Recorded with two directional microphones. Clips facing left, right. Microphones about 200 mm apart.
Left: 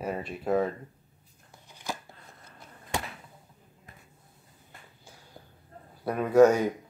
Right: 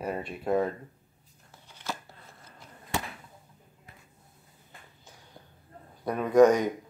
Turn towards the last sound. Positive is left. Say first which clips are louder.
# even
turn(degrees=10)  # may be behind; listen again after turning